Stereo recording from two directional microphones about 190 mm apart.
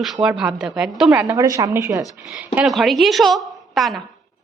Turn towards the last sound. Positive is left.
turn(degrees=0)  # may be behind; listen again after turning